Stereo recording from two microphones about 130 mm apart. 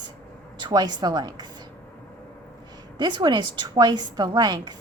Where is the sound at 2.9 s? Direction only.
35° right (ahead or behind).